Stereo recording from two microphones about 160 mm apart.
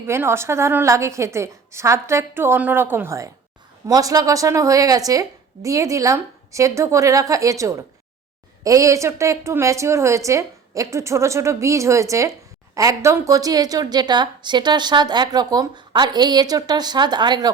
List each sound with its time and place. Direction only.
0.1 s a woman's voice: 15° right (ahead or behind)